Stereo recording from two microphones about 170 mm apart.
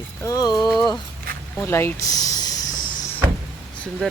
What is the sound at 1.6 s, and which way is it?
Snake, 15° left (ahead or behind).